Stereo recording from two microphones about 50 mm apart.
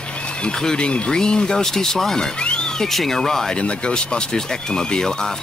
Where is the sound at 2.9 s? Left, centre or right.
Centre.